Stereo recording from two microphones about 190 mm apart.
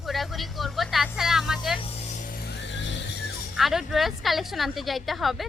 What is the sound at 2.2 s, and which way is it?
Music, 50° left (ahead or behind).